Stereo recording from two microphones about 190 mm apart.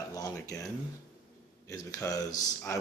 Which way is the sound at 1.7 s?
20° left (ahead or behind).